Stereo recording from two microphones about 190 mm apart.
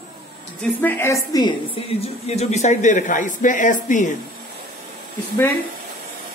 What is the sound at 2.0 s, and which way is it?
Speech, 35° left (ahead or behind).